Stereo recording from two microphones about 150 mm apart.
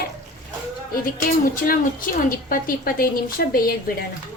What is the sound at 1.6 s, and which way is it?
A woman's voice, 70° left (ahead or behind).